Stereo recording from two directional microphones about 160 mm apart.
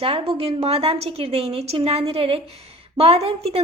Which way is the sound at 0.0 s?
35° right (ahead or behind).